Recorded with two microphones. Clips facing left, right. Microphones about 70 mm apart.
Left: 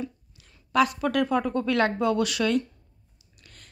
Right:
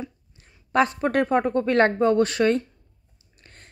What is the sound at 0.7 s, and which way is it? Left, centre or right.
A woman's voice, right.